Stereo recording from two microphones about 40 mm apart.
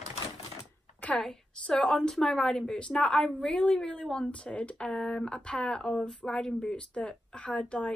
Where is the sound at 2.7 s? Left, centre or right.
Left.